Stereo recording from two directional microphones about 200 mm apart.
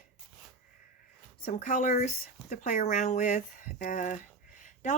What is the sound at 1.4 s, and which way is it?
Speech, 40° left (ahead or behind).